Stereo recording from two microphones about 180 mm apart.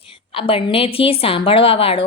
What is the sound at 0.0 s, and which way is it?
A woman's voice, 30° left (ahead or behind).